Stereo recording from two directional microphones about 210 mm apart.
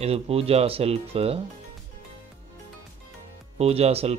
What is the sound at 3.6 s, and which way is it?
Speech, 30° right (ahead or behind).